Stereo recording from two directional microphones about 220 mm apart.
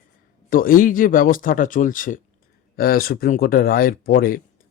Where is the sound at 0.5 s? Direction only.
40° left (ahead or behind).